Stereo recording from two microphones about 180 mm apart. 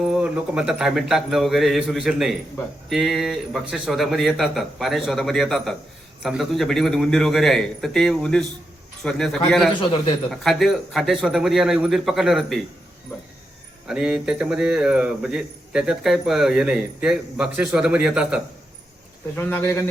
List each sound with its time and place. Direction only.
0.0 s a man's voice: 5° right (ahead or behind)
13.8 s a man's voice: 5° right (ahead or behind)
19.4 s speech: 10° left (ahead or behind)